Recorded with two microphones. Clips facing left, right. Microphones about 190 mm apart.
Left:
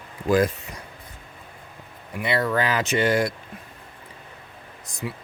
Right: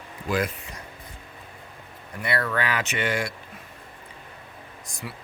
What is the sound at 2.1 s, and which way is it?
Speech, 20° left (ahead or behind).